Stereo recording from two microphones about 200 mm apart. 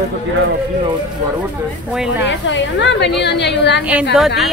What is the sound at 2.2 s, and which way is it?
A woman's voice, 65° left (ahead or behind).